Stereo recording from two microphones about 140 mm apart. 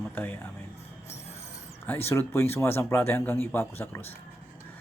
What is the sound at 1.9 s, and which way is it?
Speech, 15° left (ahead or behind).